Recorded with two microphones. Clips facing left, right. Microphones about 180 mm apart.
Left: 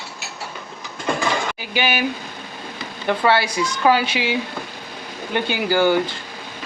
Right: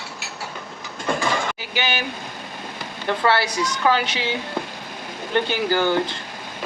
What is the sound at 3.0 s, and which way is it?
Speech, 15° left (ahead or behind).